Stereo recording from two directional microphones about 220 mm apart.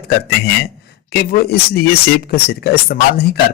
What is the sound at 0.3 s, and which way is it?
Speech, 45° left (ahead or behind).